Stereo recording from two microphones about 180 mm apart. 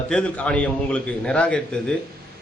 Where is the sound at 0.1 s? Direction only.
5° left (ahead or behind).